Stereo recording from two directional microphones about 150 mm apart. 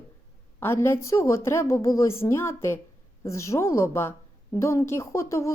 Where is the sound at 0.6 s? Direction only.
15° left (ahead or behind).